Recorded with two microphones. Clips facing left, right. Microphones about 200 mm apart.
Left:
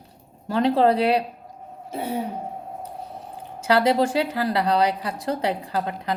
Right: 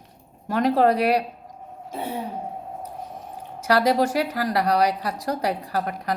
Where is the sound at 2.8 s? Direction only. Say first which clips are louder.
Even; 30° left (ahead or behind).